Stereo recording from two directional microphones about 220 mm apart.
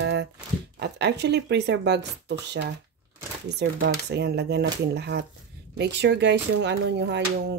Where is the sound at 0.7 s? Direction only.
50° right (ahead or behind).